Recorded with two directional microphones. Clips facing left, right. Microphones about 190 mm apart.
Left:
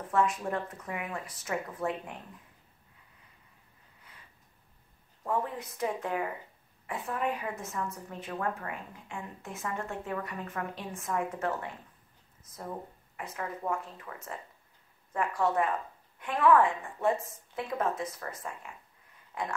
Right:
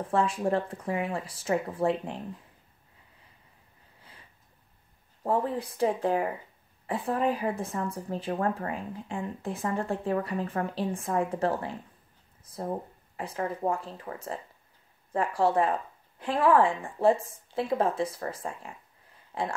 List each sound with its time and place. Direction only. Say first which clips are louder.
0.1 s speech: right 3 dB; 30° right (ahead or behind)
5.2 s speech: right 5 dB; 30° right (ahead or behind)